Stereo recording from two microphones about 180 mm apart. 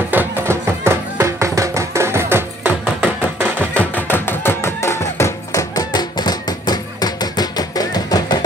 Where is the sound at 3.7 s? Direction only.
10° left (ahead or behind).